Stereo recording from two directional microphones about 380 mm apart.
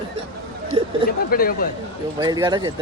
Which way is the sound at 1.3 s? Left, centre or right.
Left.